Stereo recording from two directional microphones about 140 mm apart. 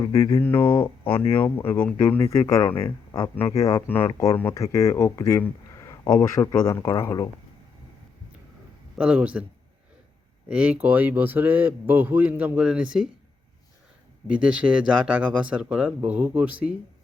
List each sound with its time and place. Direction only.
0.0 s speech: 20° left (ahead or behind)
9.0 s a man's voice: 10° right (ahead or behind)
10.5 s a man's voice: 10° right (ahead or behind)
14.3 s a man's voice: 10° right (ahead or behind)